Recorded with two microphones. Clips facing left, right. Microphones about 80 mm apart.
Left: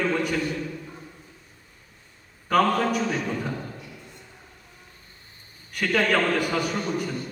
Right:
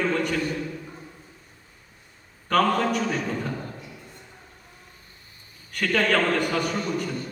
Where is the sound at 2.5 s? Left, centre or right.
Centre.